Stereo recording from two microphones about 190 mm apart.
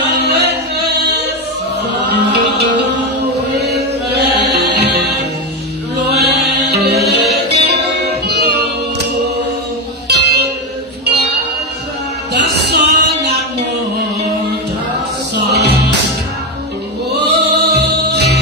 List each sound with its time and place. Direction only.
0.3 s music: 60° right (ahead or behind)
10.1 s music: 60° right (ahead or behind)
12.3 s music: 60° right (ahead or behind)
15.4 s music: 60° right (ahead or behind)
17.2 s music: 60° right (ahead or behind)